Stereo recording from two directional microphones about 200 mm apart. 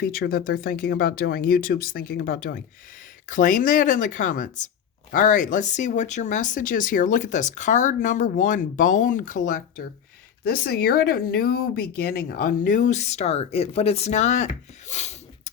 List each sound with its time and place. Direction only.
0.0 s speech: 50° left (ahead or behind)